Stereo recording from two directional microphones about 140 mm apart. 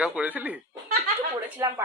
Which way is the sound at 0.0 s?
10° right (ahead or behind).